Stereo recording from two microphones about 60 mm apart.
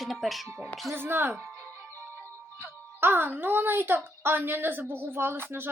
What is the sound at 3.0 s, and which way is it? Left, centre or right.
A woman's voice, right.